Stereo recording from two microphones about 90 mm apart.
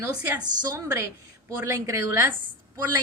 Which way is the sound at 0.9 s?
35° right (ahead or behind).